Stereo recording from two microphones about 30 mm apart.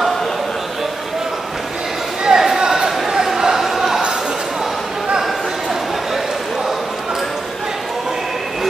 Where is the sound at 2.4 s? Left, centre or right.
Centre.